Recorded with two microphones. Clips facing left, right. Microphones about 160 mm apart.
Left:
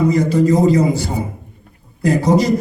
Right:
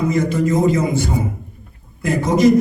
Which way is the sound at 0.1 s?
35° left (ahead or behind).